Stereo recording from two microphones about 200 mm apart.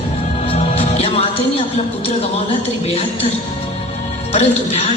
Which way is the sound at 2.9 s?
30° left (ahead or behind).